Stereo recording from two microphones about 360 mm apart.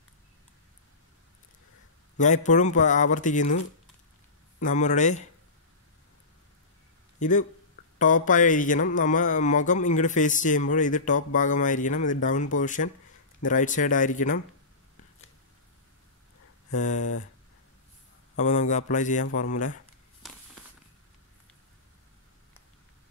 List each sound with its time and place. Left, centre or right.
2.1 s speech: centre
4.6 s speech: centre
7.2 s speech: left
16.7 s speech: left
18.4 s speech: centre